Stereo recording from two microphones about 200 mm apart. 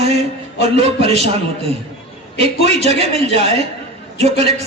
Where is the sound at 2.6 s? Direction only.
30° right (ahead or behind).